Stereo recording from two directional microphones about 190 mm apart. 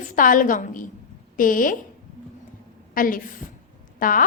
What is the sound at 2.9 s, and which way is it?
A woman's voice, 45° left (ahead or behind).